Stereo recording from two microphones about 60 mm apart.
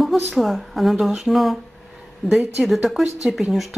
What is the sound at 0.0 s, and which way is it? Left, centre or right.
Speech, centre.